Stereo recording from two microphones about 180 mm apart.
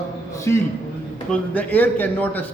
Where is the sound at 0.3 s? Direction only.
15° left (ahead or behind).